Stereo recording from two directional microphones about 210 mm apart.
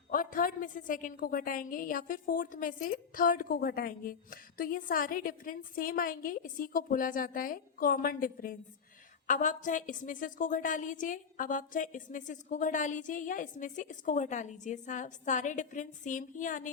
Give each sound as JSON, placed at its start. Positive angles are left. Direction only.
{"t": 0.1, "sound": "a woman's voice", "side_deg": 40}